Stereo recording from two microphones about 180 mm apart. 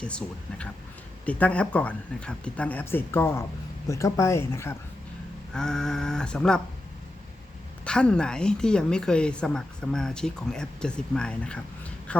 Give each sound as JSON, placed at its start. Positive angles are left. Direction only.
{"t": 0.0, "sound": "a woman's voice", "side_deg": 5}
{"t": 5.5, "sound": "a woman's voice", "side_deg": 5}
{"t": 7.9, "sound": "a woman's voice", "side_deg": 5}